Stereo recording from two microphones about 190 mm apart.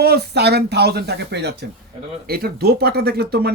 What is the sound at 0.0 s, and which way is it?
Speech, 60° right (ahead or behind).